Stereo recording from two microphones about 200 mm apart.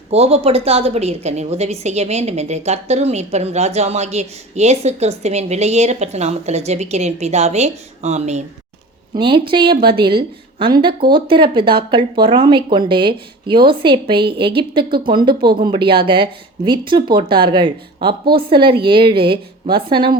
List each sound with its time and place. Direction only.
0.1 s a woman's voice: 30° right (ahead or behind)